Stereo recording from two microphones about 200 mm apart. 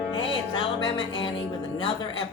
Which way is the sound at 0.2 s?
25° left (ahead or behind).